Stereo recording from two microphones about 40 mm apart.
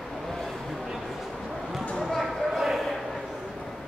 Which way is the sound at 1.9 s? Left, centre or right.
Centre.